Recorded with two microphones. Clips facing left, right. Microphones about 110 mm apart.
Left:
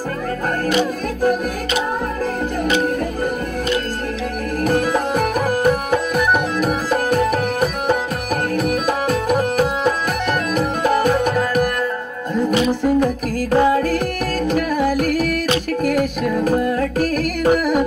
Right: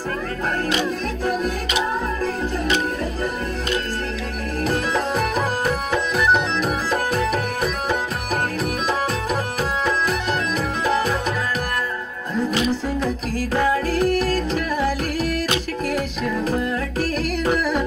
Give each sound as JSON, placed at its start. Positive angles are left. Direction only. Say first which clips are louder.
{"t": 4.6, "sound": "music", "louder": "left 4 dB", "side_deg": 50}
{"t": 7.1, "sound": "tabla", "louder": "left 5 dB", "side_deg": 50}
{"t": 8.5, "sound": "music", "louder": "left 4 dB", "side_deg": 50}